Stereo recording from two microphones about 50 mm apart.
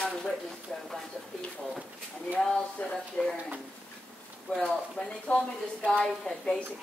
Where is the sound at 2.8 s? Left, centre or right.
Left.